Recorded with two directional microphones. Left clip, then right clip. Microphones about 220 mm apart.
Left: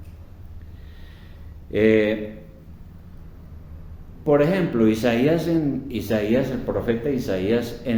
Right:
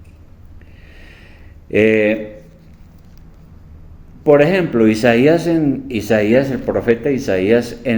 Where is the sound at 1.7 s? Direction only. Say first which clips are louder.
Right 5 dB; 45° right (ahead or behind).